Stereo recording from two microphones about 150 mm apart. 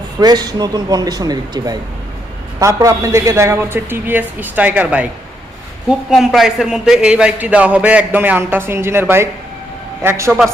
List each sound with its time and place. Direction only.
0.2 s a man's voice: 25° right (ahead or behind)